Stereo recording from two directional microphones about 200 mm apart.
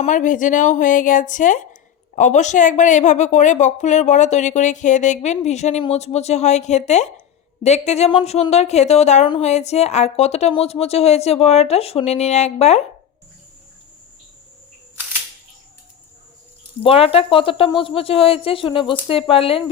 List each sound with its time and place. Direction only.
0.0 s a woman's voice: 40° left (ahead or behind)
16.8 s speech: 30° left (ahead or behind)